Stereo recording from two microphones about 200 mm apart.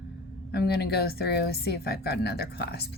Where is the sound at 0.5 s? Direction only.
50° left (ahead or behind).